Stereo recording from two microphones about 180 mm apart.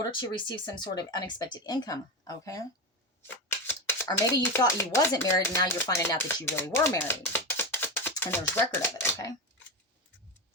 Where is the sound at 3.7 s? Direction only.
10° left (ahead or behind).